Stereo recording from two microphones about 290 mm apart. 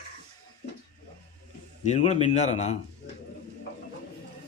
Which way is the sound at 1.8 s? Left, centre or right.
Left.